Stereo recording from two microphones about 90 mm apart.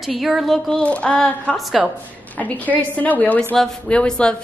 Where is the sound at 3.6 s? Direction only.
10° left (ahead or behind).